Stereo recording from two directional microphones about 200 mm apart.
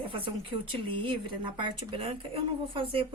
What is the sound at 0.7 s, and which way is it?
Speech, 25° right (ahead or behind).